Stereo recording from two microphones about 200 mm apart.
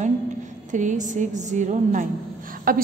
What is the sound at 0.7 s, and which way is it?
A woman's voice, 40° right (ahead or behind).